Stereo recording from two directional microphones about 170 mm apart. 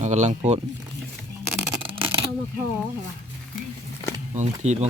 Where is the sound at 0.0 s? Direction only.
45° right (ahead or behind).